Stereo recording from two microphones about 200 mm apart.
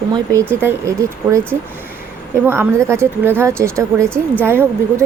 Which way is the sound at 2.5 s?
10° right (ahead or behind).